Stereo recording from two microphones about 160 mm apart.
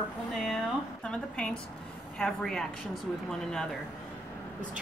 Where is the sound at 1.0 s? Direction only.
5° left (ahead or behind).